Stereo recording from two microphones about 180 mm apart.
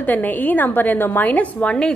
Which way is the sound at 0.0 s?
10° left (ahead or behind).